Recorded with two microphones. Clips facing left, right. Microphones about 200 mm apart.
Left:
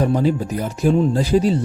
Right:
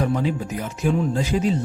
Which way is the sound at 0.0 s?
35° left (ahead or behind).